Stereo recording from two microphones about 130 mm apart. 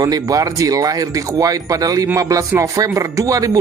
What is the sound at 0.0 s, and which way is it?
Speech, 30° right (ahead or behind).